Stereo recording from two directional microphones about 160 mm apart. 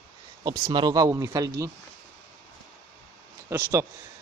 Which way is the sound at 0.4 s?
25° right (ahead or behind).